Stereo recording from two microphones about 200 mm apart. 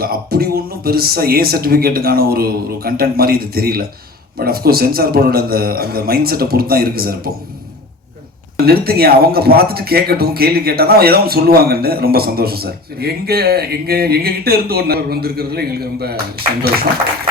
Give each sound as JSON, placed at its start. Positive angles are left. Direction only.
{"t": 0.0, "sound": "speech", "side_deg": -50}
{"t": 8.5, "sound": "speech", "side_deg": -50}